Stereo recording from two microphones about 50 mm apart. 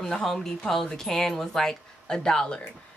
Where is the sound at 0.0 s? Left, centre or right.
Centre.